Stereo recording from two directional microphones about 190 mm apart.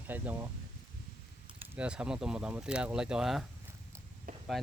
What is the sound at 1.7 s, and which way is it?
Speech, 5° right (ahead or behind).